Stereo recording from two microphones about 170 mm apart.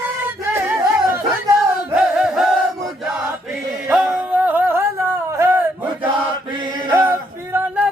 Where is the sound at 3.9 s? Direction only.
10° right (ahead or behind).